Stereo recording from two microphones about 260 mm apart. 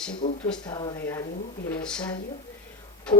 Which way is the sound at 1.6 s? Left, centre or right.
Centre.